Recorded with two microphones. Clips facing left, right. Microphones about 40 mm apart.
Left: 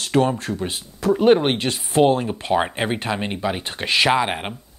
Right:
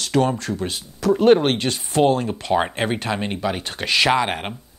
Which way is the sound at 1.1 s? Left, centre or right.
Centre.